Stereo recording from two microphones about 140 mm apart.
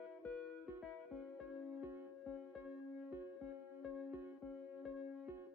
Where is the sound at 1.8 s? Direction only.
15° right (ahead or behind).